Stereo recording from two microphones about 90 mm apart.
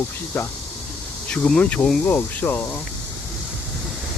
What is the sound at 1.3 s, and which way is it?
Speech, 10° left (ahead or behind).